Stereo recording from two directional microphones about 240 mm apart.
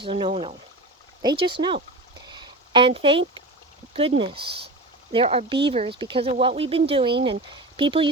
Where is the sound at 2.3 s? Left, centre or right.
Centre.